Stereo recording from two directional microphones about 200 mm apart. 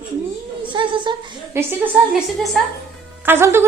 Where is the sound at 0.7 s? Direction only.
25° right (ahead or behind).